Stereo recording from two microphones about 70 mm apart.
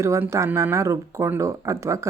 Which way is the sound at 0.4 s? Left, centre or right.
Right.